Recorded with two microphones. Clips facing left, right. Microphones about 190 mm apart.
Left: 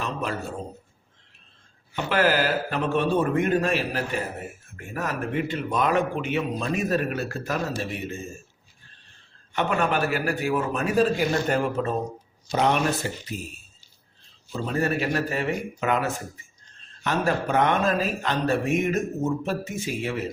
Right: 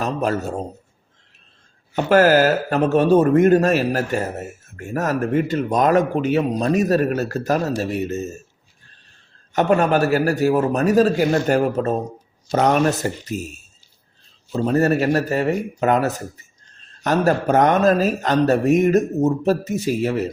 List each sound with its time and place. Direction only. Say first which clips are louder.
0.0 s a man's voice: right 8 dB; 40° right (ahead or behind)
1.9 s speech: right 8 dB; 45° right (ahead or behind)
9.5 s speech: right 8 dB; 40° right (ahead or behind)